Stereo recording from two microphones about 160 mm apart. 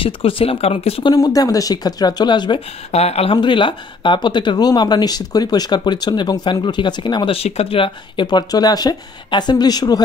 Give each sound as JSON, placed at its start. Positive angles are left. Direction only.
{"t": 0.0, "sound": "speech", "side_deg": 35}
{"t": 1.1, "sound": "speech", "side_deg": 25}
{"t": 2.9, "sound": "speech", "side_deg": 40}